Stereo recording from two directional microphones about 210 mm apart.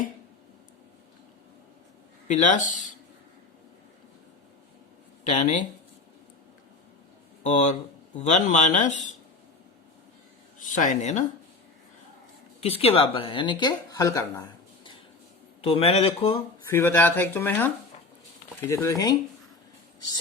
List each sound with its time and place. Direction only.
2.2 s speech: 35° left (ahead or behind)
5.2 s speech: 35° left (ahead or behind)
7.4 s speech: 35° left (ahead or behind)
10.6 s speech: 35° left (ahead or behind)
12.5 s a woman's voice: 30° left (ahead or behind)
15.6 s a woman's voice: 25° left (ahead or behind)
16.6 s speech: 10° left (ahead or behind)
18.7 s speech: 15° left (ahead or behind)